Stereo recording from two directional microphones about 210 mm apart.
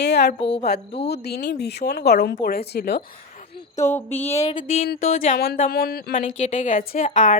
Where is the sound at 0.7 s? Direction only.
45° left (ahead or behind).